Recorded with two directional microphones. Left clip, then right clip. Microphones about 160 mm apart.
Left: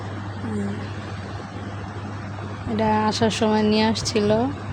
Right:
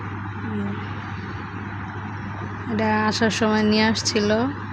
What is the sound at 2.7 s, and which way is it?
A woman's voice, 20° left (ahead or behind).